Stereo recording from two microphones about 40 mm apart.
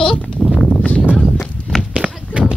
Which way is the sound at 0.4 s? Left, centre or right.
Centre.